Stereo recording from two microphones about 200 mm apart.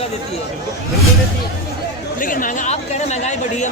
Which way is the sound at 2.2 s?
45° left (ahead or behind).